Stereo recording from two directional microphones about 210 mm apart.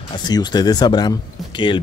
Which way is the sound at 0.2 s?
20° left (ahead or behind).